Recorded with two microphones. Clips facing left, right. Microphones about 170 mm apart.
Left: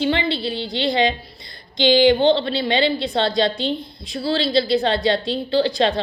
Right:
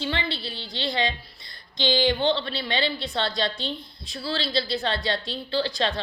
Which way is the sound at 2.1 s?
30° left (ahead or behind).